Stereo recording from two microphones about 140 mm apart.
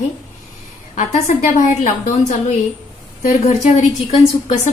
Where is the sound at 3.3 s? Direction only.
55° left (ahead or behind).